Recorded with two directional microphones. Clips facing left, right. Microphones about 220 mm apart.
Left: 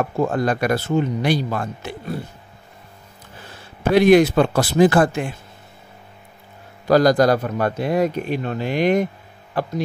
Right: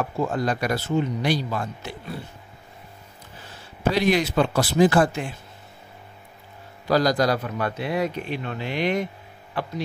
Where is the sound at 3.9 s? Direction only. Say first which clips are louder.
Left 9 dB; 50° left (ahead or behind).